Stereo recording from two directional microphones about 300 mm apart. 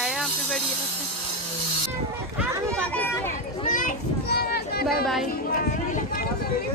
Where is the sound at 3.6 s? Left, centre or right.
Left.